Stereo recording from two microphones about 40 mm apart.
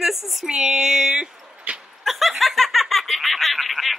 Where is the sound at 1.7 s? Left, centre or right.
Right.